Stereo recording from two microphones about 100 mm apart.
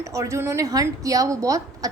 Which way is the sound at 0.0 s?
30° right (ahead or behind).